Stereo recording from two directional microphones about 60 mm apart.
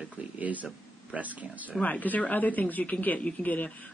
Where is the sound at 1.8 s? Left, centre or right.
Left.